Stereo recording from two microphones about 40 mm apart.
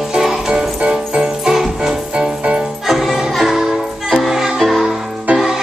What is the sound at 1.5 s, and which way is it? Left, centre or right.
Music, centre.